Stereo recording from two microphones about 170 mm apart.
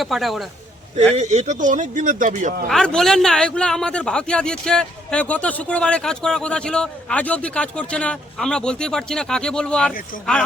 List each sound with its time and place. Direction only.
0.0 s a man's voice: centre (ahead or behind)
1.1 s speech: 40° right (ahead or behind)
2.6 s a man's voice: 5° left (ahead or behind)